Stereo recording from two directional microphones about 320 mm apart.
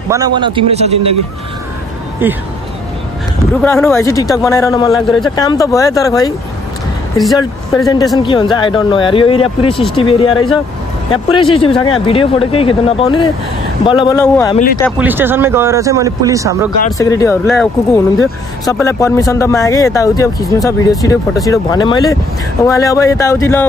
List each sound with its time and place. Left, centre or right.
0.1 s speech: centre
2.2 s speech: centre
3.6 s speech: centre
4.9 s speech: centre
5.3 s speech: centre
7.3 s speech: centre
15.0 s speech: centre
17.0 s speech: centre